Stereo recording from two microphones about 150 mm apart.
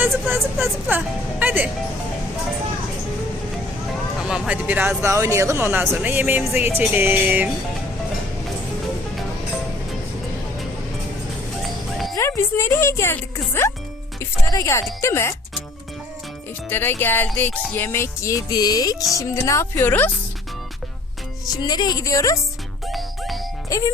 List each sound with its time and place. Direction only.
0.0 s speech: 15° right (ahead or behind)
4.3 s speech: 5° right (ahead or behind)
11.9 s music: centre (ahead or behind)
12.1 s speech: 20° left (ahead or behind)
14.2 s music: 20° left (ahead or behind)
15.0 s speech: 20° left (ahead or behind)
16.6 s speech: 15° left (ahead or behind)
17.7 s music: 15° left (ahead or behind)
19.1 s speech: 20° left (ahead or behind)
21.4 s music: 25° left (ahead or behind)
22.9 s music: centre (ahead or behind)
23.6 s speech: 20° left (ahead or behind)